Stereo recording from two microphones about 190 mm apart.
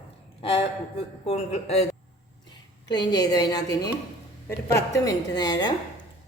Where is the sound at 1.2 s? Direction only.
35° left (ahead or behind).